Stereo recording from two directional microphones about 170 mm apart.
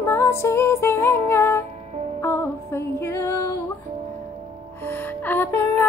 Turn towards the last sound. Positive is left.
turn(degrees=10)  # may be behind; listen again after turning